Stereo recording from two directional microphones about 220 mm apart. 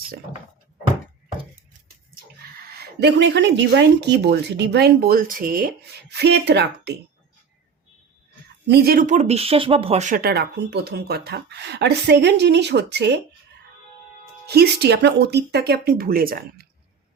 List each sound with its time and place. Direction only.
2.6 s speech: 45° right (ahead or behind)
8.6 s speech: 45° right (ahead or behind)
14.4 s speech: 45° right (ahead or behind)